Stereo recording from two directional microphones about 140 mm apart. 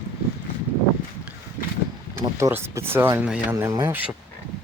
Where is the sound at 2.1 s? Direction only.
20° right (ahead or behind).